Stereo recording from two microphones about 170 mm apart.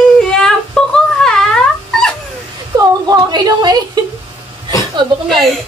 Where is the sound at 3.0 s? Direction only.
20° right (ahead or behind).